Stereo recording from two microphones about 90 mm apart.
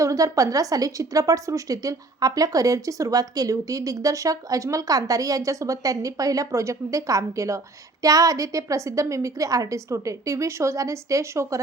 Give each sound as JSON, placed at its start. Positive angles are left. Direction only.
{"t": 0.0, "sound": "a woman's voice", "side_deg": -40}